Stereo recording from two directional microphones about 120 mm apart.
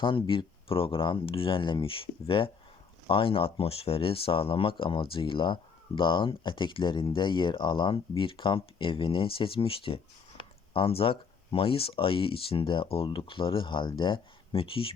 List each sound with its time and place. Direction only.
0.3 s speech: 50° left (ahead or behind)